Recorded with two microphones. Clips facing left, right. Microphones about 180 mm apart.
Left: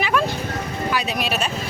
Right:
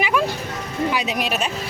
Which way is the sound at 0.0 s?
15° right (ahead or behind).